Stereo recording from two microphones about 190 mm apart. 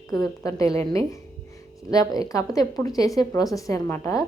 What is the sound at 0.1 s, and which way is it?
Speech, 20° left (ahead or behind).